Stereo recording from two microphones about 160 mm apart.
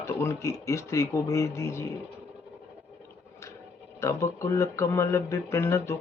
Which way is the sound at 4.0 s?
20° left (ahead or behind).